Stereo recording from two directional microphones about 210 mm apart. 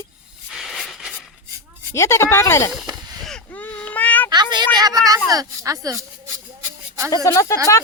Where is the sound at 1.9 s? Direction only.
15° left (ahead or behind).